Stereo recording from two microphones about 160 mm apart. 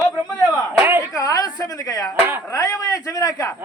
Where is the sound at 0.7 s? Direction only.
15° right (ahead or behind).